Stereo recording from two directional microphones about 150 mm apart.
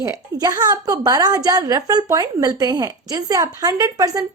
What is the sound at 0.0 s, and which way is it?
A woman's voice, 25° right (ahead or behind).